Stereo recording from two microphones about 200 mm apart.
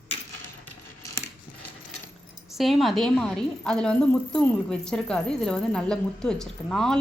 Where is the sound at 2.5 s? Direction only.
Centre (ahead or behind).